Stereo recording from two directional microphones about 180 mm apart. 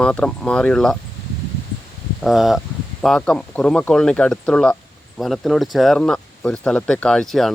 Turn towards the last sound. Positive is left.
turn(degrees=0)  # may be behind; listen again after turning